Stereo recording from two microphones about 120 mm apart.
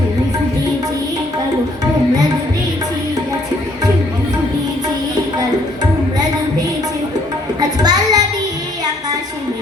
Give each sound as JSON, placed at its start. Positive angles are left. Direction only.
{"t": 7.8, "sound": "music", "side_deg": -35}